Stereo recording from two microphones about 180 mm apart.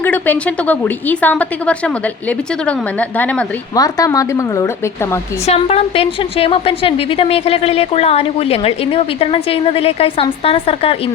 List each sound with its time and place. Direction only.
0.0 s a woman's voice: 10° left (ahead or behind)
3.8 s a woman's voice: 20° left (ahead or behind)
5.5 s a woman's voice: 35° left (ahead or behind)